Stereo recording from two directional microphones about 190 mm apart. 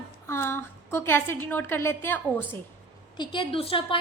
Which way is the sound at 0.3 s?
15° left (ahead or behind).